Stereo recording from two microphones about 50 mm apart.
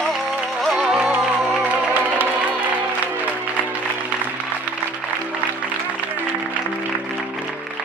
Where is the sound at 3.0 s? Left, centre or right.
Right.